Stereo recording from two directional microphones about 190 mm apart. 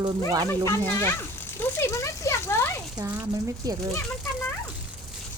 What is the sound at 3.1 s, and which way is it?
Speech, 15° right (ahead or behind).